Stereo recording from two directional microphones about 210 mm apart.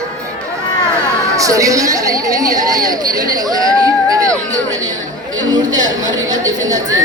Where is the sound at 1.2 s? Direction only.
15° right (ahead or behind).